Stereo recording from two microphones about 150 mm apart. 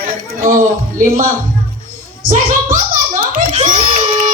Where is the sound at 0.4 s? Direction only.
60° right (ahead or behind).